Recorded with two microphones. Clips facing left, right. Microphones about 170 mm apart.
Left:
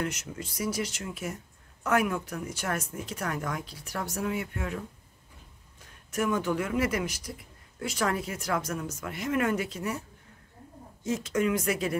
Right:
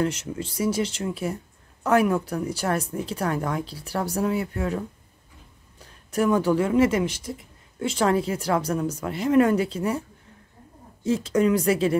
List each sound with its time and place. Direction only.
0.0 s speech: 30° right (ahead or behind)
11.1 s speech: 35° right (ahead or behind)